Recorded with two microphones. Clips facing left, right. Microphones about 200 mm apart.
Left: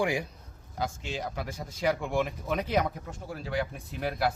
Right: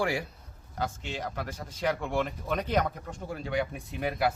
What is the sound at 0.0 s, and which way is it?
Speech, 15° left (ahead or behind).